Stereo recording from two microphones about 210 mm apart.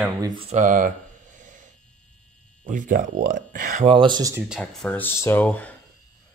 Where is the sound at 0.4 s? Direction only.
35° right (ahead or behind).